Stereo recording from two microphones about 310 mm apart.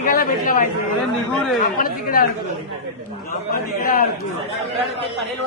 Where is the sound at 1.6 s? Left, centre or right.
Left.